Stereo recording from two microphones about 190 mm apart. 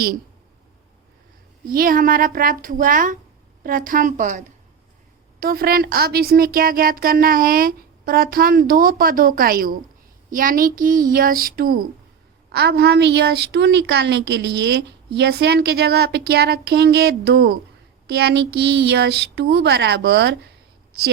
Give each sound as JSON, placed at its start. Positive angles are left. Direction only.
{"t": 1.6, "sound": "a woman's voice", "side_deg": -50}